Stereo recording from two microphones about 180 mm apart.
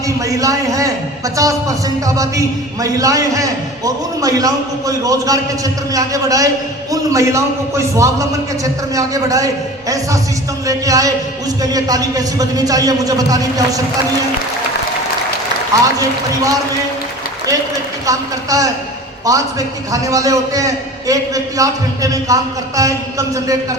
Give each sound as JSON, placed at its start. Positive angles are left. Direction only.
{"t": 0.3, "sound": "a man's voice", "side_deg": -20}
{"t": 10.7, "sound": "a man's voice", "side_deg": -20}
{"t": 16.0, "sound": "a man's voice", "side_deg": -20}
{"t": 18.0, "sound": "a man's voice", "side_deg": -20}